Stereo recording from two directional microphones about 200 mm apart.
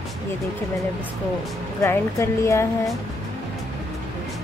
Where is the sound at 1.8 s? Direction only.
15° left (ahead or behind).